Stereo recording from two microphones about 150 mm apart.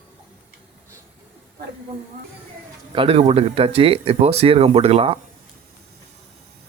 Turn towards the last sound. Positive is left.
turn(degrees=-40)  # may be behind; listen again after turning